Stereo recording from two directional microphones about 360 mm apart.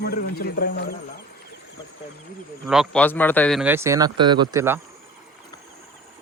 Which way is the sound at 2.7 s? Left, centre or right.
Centre.